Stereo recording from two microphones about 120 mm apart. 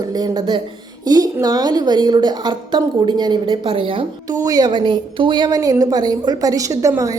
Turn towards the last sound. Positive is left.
turn(degrees=-25)  # may be behind; listen again after turning